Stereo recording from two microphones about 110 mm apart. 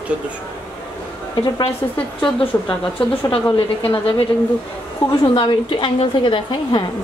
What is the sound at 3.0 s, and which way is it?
A woman's voice, 50° left (ahead or behind).